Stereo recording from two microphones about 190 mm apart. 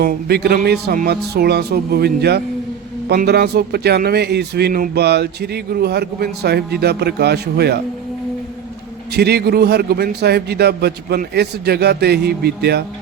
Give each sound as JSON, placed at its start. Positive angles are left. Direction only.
{"t": 0.0, "sound": "speech", "side_deg": -55}
{"t": 9.1, "sound": "speech", "side_deg": -60}